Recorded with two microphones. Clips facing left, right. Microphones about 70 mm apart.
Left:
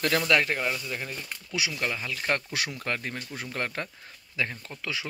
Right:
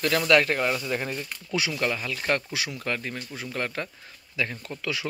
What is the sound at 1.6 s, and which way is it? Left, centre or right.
Speech, centre.